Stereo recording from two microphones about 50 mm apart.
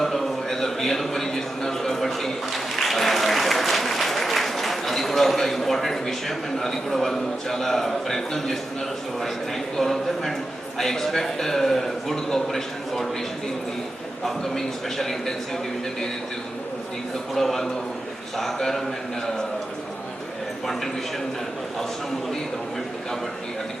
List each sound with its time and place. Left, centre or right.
0.0 s a sound: centre
9.7 s a man's voice: centre
14.3 s a man's voice: centre
17.3 s a man's voice: centre